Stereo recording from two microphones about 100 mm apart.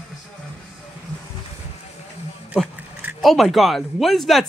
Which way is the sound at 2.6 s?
15° right (ahead or behind).